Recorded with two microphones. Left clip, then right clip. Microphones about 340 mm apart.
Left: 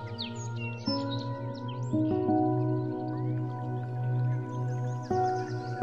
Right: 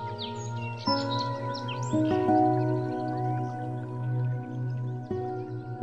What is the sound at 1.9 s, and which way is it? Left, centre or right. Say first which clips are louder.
Music: right 3 dB; right.